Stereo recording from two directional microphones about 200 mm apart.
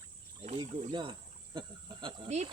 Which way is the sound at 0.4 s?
25° right (ahead or behind).